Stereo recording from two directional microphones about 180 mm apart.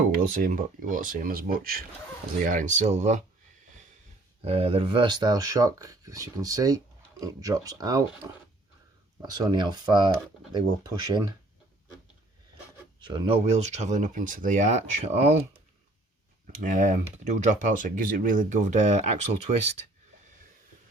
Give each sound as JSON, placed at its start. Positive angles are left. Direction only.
{"t": 0.4, "sound": "speech", "side_deg": -50}
{"t": 4.4, "sound": "speech", "side_deg": -35}
{"t": 13.0, "sound": "speech", "side_deg": -25}
{"t": 16.6, "sound": "speech", "side_deg": -45}